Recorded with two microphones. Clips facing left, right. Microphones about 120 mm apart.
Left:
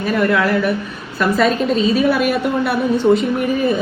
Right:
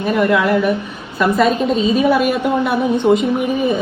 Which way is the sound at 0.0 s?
10° right (ahead or behind).